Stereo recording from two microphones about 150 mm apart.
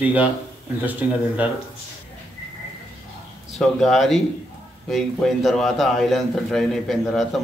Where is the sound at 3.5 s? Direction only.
Centre (ahead or behind).